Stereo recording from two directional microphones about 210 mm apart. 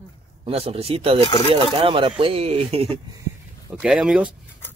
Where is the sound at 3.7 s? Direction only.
Centre (ahead or behind).